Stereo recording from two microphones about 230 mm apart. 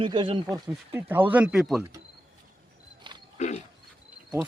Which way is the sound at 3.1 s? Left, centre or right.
Centre.